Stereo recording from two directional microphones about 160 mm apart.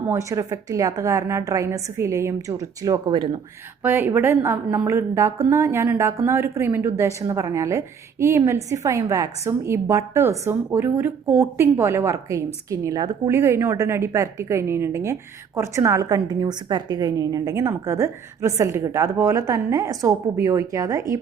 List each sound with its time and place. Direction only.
0.1 s a woman's voice: 20° right (ahead or behind)
3.8 s a woman's voice: 15° right (ahead or behind)